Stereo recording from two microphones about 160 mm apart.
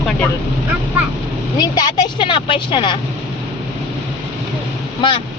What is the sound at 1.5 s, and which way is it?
Speech, 25° left (ahead or behind).